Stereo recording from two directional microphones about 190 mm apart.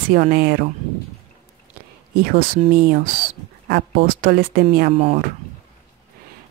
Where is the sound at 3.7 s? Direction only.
55° right (ahead or behind).